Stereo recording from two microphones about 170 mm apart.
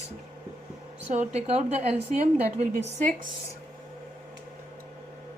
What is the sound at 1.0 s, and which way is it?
A woman's voice, 40° right (ahead or behind).